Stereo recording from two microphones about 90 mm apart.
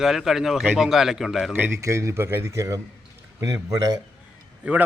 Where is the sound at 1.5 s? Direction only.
25° right (ahead or behind); by 3.9 s 40° right (ahead or behind).